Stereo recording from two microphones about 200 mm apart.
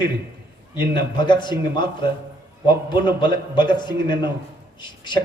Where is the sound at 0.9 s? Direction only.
25° left (ahead or behind).